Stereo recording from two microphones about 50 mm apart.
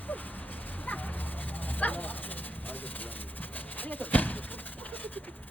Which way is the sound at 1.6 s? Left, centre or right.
Left.